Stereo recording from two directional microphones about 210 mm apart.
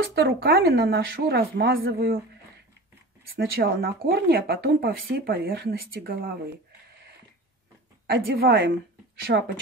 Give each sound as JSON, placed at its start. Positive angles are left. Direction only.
{"t": 0.0, "sound": "speech", "side_deg": -50}
{"t": 3.3, "sound": "speech", "side_deg": -45}
{"t": 8.4, "sound": "speech", "side_deg": -50}